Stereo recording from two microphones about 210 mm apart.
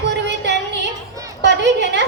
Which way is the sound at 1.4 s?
55° right (ahead or behind).